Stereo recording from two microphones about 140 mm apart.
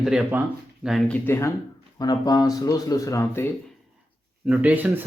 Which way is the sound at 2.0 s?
30° left (ahead or behind).